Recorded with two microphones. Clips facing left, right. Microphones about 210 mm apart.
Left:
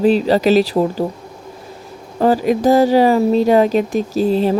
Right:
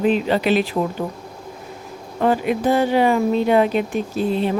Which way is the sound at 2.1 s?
35° left (ahead or behind).